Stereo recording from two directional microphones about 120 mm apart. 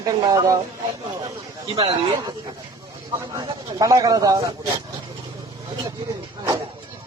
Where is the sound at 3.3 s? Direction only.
30° right (ahead or behind).